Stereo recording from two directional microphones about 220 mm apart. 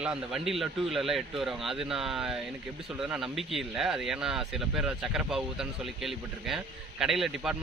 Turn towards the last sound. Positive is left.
turn(degrees=0)  # may be behind; listen again after turning